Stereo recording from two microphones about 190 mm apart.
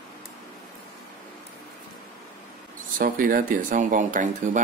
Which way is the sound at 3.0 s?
50° right (ahead or behind).